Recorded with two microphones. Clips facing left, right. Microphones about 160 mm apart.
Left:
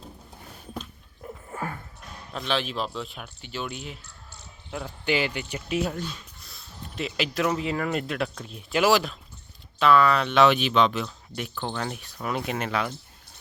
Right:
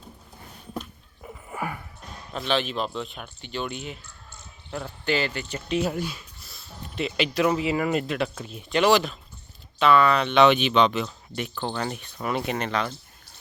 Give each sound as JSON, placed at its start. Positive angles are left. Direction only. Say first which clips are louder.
{"t": 1.5, "sound": "a sound", "louder": "right 2 dB", "side_deg": -15}
{"t": 2.3, "sound": "speech", "louder": "right 2 dB", "side_deg": 0}
{"t": 5.9, "sound": "speech", "louder": "right 3 dB", "side_deg": -10}